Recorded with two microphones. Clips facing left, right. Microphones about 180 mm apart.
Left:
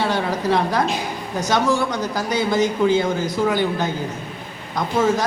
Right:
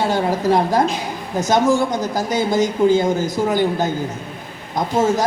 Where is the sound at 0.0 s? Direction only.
45° right (ahead or behind).